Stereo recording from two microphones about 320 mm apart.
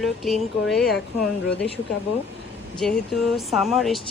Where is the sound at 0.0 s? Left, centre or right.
Centre.